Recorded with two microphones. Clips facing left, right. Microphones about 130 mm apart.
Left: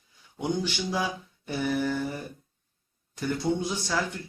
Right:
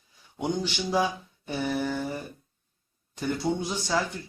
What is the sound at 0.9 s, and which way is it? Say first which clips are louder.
Mantra: right 4 dB; 15° right (ahead or behind).